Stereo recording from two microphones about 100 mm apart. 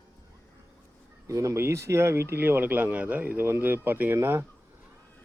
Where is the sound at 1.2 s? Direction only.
30° right (ahead or behind).